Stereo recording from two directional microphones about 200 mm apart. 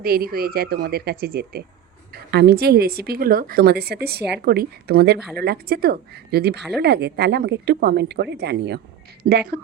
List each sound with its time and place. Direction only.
0.0 s a woman's voice: 50° right (ahead or behind)
9.2 s a woman's voice: 45° right (ahead or behind)